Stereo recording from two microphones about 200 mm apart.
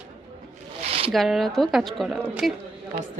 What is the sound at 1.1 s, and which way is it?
Speech, centre (ahead or behind).